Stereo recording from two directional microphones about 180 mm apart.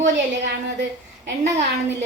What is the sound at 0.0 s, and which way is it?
Speech, 80° right.